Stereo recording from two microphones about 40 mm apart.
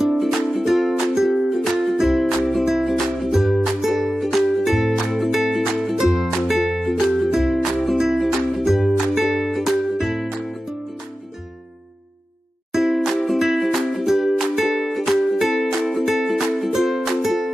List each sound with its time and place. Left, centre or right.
0.0 s music: centre
12.7 s music: centre